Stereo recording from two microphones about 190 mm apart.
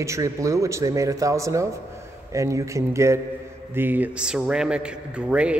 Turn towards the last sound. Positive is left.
turn(degrees=-5)  # may be behind; listen again after turning